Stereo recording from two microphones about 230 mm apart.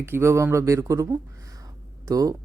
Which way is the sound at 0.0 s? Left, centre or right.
Centre.